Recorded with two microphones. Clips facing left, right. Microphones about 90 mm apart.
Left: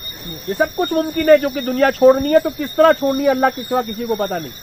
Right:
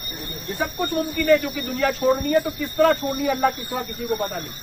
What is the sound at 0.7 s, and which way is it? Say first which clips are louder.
Speech: left 6 dB; 55° left (ahead or behind).